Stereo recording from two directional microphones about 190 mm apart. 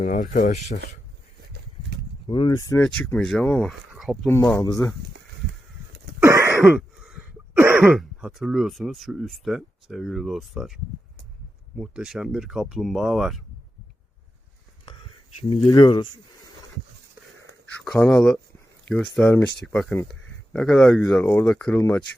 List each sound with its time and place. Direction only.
0.0 s speech: 45° left (ahead or behind)
2.2 s speech: 25° left (ahead or behind)
2.8 s speech: 5° left (ahead or behind)
4.5 s speech: 15° left (ahead or behind)
6.2 s throat clearing: 15° right (ahead or behind)
6.6 s speech: centre (ahead or behind)
11.8 s speech: 5° right (ahead or behind)
14.8 s dishes: 25° left (ahead or behind)
15.6 s speech: 25° left (ahead or behind)
17.8 s speech: 5° left (ahead or behind)
19.5 s speech: 65° left (ahead or behind)
19.7 s speech: 5° left (ahead or behind)
21.8 s speech: 15° left (ahead or behind)